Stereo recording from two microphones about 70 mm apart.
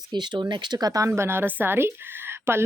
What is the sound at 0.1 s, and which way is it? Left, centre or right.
Speech, right.